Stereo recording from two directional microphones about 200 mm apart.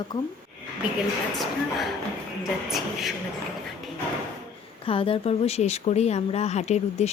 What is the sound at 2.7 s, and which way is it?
Speech, centre (ahead or behind).